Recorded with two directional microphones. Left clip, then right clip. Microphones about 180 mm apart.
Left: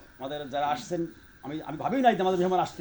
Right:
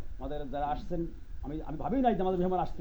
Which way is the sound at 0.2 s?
15° left (ahead or behind).